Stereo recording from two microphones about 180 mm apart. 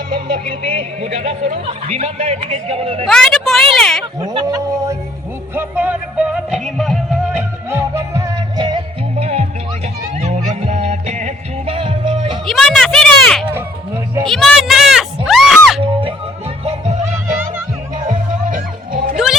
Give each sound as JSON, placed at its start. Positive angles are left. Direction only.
{"t": 0.1, "sound": "speech", "side_deg": -30}
{"t": 3.1, "sound": "a woman's voice", "side_deg": 5}
{"t": 4.2, "sound": "speech", "side_deg": -20}
{"t": 5.5, "sound": "music", "side_deg": -10}
{"t": 7.7, "sound": "music", "side_deg": -15}
{"t": 9.1, "sound": "music", "side_deg": -35}
{"t": 12.5, "sound": "a sound", "side_deg": 0}
{"t": 15.8, "sound": "music", "side_deg": -30}
{"t": 19.1, "sound": "music", "side_deg": 0}